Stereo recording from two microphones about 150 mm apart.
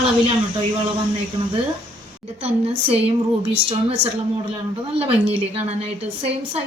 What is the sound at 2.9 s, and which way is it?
Speech, 40° right (ahead or behind).